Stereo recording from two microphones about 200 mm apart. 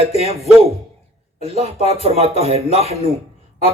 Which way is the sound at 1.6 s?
30° right (ahead or behind).